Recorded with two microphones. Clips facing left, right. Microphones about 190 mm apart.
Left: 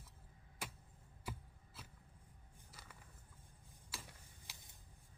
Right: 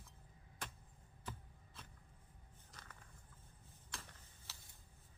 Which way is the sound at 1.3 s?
10° left (ahead or behind).